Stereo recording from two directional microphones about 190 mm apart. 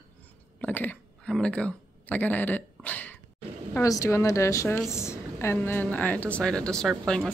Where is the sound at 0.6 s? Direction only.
10° left (ahead or behind).